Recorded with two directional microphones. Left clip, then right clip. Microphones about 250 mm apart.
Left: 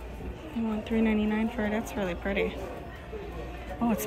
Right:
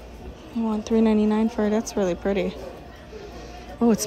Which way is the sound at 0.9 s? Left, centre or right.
Centre.